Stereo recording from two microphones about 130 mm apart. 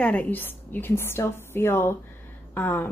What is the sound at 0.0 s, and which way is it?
Speech, 10° left (ahead or behind).